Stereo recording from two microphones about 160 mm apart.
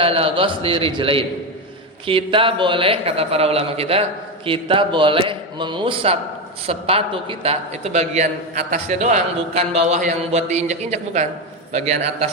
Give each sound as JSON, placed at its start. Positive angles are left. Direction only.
{"t": 0.0, "sound": "a man's voice", "side_deg": -35}